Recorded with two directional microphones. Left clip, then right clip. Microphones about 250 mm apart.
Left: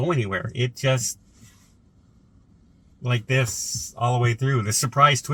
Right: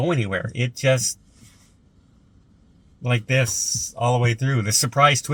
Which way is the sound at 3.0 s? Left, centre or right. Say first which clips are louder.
Right 3 dB; centre.